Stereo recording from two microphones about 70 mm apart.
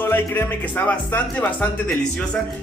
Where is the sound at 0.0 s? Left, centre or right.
Left.